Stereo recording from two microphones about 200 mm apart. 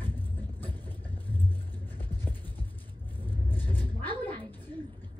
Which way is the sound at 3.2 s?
10° left (ahead or behind).